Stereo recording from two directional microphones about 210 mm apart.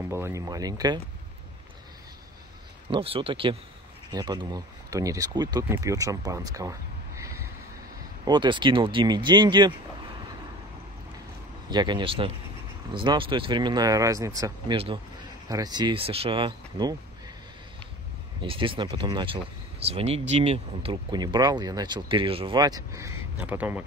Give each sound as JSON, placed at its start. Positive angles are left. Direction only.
{"t": 0.0, "sound": "speech", "side_deg": -10}
{"t": 2.9, "sound": "speech", "side_deg": -25}
{"t": 7.2, "sound": "a sound", "side_deg": -15}
{"t": 8.3, "sound": "speech", "side_deg": -20}
{"t": 11.7, "sound": "speech", "side_deg": -20}
{"t": 18.4, "sound": "speech", "side_deg": -25}